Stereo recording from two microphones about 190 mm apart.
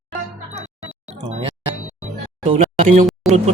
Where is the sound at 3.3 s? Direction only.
35° right (ahead or behind).